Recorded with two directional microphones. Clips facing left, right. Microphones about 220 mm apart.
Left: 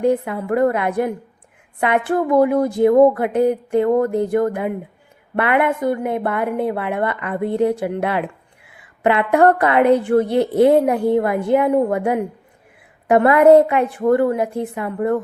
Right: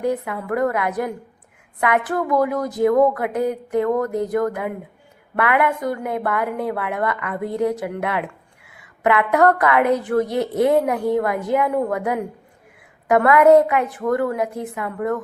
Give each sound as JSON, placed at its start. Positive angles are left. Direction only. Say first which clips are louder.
{"t": 0.0, "sound": "a woman's voice", "louder": "left 5 dB", "side_deg": 30}